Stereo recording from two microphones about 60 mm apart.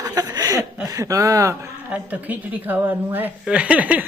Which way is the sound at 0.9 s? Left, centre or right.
Right.